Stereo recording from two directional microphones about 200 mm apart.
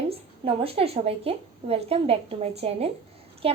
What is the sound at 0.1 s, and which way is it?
A woman's voice, 30° right (ahead or behind).